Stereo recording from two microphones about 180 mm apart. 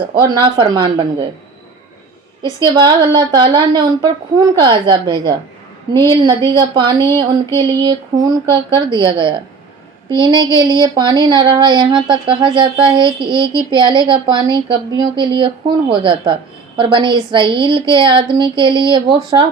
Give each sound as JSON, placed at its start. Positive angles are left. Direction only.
{"t": 0.1, "sound": "a woman's voice", "side_deg": -25}
{"t": 2.6, "sound": "a woman's voice", "side_deg": -25}